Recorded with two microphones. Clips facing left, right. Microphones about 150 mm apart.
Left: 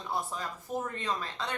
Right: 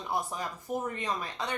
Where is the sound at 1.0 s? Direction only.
15° right (ahead or behind).